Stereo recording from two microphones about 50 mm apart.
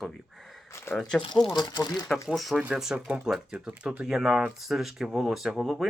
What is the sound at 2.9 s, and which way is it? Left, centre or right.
Speech, right.